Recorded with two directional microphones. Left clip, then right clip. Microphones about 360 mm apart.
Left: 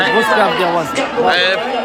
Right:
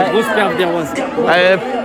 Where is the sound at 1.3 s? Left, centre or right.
Centre.